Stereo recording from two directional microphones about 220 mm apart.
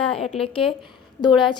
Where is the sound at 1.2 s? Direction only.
20° left (ahead or behind).